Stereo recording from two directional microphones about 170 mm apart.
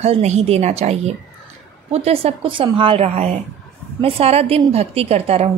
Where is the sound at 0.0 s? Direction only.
40° right (ahead or behind).